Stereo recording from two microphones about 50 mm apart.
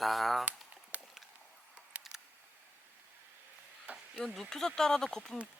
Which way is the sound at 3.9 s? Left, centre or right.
Right.